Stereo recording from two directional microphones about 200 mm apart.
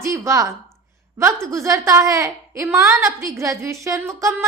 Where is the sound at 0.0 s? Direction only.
15° right (ahead or behind).